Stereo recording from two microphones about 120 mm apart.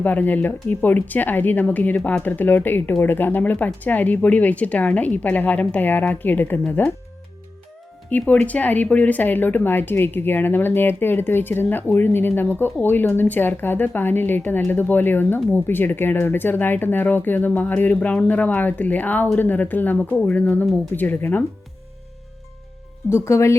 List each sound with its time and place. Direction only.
0.0 s a woman's voice: 15° left (ahead or behind)
8.3 s a woman's voice: 10° left (ahead or behind)
23.0 s speech: 20° left (ahead or behind)